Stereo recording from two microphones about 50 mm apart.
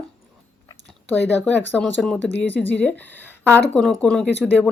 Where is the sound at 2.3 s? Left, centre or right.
Left.